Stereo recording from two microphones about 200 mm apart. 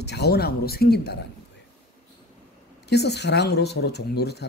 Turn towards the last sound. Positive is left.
turn(degrees=55)  # may be behind; listen again after turning